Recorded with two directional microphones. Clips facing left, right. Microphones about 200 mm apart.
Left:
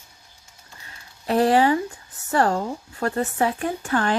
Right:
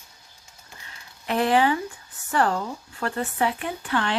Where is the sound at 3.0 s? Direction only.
40° left (ahead or behind).